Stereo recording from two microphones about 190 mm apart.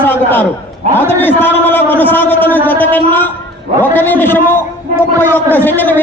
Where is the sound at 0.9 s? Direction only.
10° left (ahead or behind).